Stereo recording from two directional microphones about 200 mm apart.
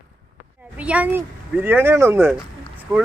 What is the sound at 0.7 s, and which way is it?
Speech, 5° right (ahead or behind).